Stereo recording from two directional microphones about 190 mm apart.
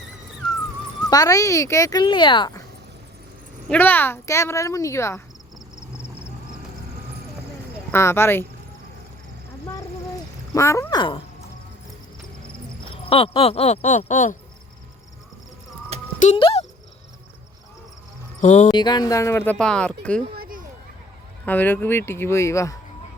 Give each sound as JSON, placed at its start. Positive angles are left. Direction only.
{"t": 1.1, "sound": "speech", "side_deg": 20}
{"t": 3.7, "sound": "speech", "side_deg": 10}
{"t": 7.9, "sound": "speech", "side_deg": 15}
{"t": 10.5, "sound": "speech", "side_deg": 15}
{"t": 13.1, "sound": "speech", "side_deg": 30}
{"t": 16.2, "sound": "speech", "side_deg": 30}
{"t": 18.3, "sound": "cricket", "side_deg": 40}
{"t": 18.7, "sound": "speech", "side_deg": 20}
{"t": 20.3, "sound": "a sound", "side_deg": -50}
{"t": 21.4, "sound": "speech", "side_deg": 10}